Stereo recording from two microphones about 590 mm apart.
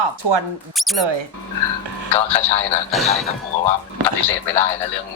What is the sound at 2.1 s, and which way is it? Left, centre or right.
Speech, left.